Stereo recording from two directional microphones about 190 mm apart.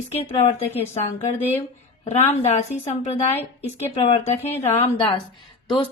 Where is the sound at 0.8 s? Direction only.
30° left (ahead or behind).